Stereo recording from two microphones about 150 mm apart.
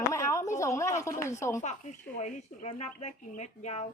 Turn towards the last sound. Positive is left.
turn(degrees=45)  # may be behind; listen again after turning